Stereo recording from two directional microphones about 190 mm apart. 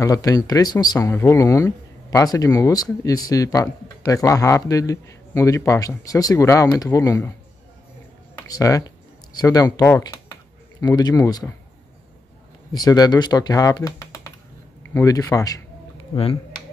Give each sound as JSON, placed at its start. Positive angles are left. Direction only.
{"t": 0.0, "sound": "speech", "side_deg": 20}
{"t": 8.5, "sound": "speech", "side_deg": 20}
{"t": 12.7, "sound": "speech", "side_deg": 20}